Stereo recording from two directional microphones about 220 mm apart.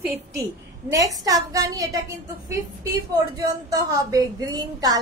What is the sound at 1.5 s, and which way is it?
Speech, 15° right (ahead or behind).